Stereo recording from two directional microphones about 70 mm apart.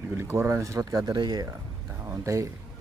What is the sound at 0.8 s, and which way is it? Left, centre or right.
Speech, right.